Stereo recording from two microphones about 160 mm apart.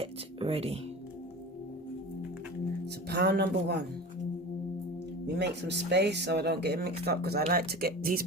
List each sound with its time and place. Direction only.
0.0 s music: 35° right (ahead or behind)
2.8 s speech: 90° right
5.2 s speech: 90° right; by 8.2 s 70° right (ahead or behind)